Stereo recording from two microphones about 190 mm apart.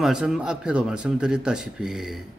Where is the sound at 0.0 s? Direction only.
Centre (ahead or behind).